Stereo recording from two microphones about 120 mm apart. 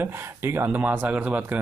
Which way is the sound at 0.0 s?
20° right (ahead or behind).